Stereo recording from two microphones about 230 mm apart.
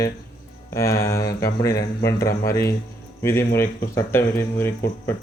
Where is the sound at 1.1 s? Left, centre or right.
Centre.